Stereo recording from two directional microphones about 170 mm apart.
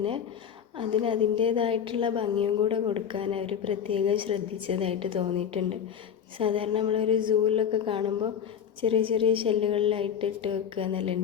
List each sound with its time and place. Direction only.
0.8 s a woman's voice: 30° right (ahead or behind)